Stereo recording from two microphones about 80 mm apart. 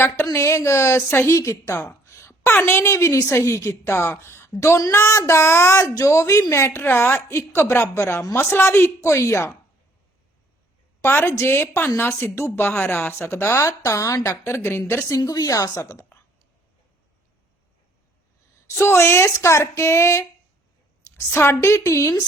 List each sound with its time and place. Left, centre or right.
0.3 s speech: left
5.8 s speech: left
6.7 s speech: left
11.0 s speech: left
14.3 s speech: left
18.7 s speech: left